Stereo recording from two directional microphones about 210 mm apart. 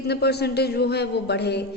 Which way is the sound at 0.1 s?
50° left (ahead or behind).